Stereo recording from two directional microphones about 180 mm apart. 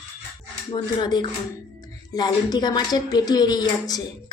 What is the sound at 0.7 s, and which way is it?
A woman's voice, 25° left (ahead or behind).